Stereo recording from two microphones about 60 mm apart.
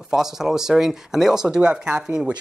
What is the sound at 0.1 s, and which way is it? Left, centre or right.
Speech, centre.